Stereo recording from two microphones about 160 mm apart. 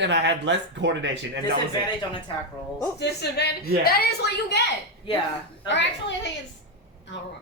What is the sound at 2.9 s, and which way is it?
Speech, 90° left.